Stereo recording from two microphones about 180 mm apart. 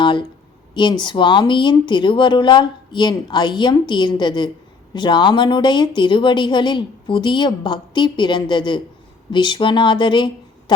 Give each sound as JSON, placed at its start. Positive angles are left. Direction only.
{"t": 0.0, "sound": "speech", "side_deg": 25}